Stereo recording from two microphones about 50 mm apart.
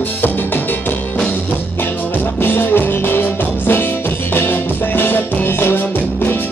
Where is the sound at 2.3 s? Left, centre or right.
Left.